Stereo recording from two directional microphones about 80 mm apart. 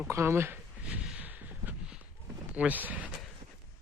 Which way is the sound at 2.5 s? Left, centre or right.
Centre.